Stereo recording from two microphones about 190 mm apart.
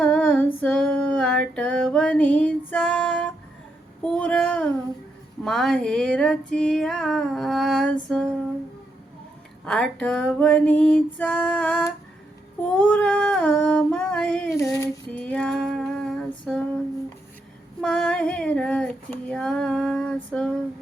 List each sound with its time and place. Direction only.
0.0 s female singing: 10° left (ahead or behind)
4.0 s a sound: 5° left (ahead or behind)
5.4 s female singing: centre (ahead or behind)
9.6 s female singing: 5° left (ahead or behind)
12.6 s a sound: 5° left (ahead or behind)
14.5 s female singing: 15° left (ahead or behind)
17.7 s female singing: 5° left (ahead or behind)